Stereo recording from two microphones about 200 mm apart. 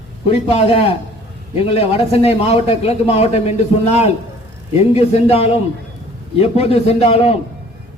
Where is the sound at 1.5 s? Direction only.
30° left (ahead or behind).